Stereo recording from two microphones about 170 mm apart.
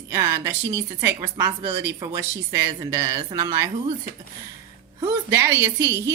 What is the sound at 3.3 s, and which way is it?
Speech, 20° right (ahead or behind).